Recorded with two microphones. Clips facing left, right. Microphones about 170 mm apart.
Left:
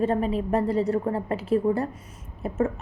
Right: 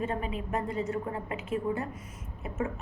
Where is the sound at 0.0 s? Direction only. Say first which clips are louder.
Left 9 dB; 35° left (ahead or behind).